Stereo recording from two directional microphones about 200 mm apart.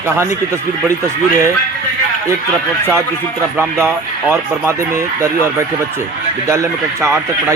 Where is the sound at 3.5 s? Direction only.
10° right (ahead or behind).